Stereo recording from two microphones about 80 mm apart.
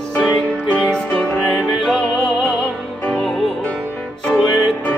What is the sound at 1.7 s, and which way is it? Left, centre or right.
Music, centre.